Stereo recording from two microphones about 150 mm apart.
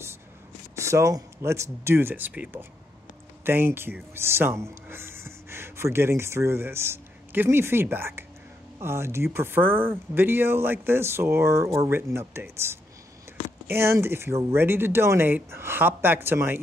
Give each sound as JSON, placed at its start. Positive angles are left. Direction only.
{"t": 0.7, "sound": "speech", "side_deg": -20}